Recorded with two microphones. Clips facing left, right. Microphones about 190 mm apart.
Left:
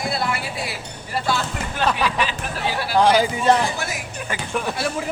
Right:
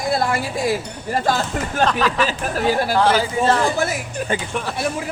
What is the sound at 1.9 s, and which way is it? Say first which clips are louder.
Speech: right 2 dB; 10° left (ahead or behind).